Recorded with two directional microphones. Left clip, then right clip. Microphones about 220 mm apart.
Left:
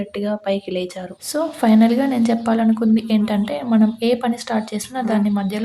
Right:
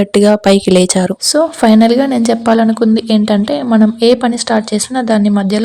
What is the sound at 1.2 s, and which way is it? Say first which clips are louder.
A woman's voice: right 8 dB; 30° right (ahead or behind).